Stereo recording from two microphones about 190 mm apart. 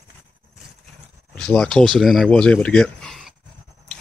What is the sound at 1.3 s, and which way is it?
Speech, 5° left (ahead or behind).